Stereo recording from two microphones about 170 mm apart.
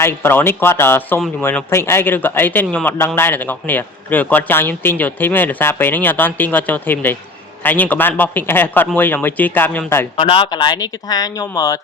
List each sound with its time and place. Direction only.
0.0 s a man's voice: 15° left (ahead or behind)
10.2 s speech: 30° left (ahead or behind)